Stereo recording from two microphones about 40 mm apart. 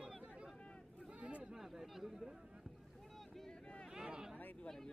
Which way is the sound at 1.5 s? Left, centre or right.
Centre.